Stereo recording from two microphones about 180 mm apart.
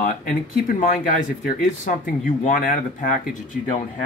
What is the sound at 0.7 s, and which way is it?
Speech, 50° left (ahead or behind).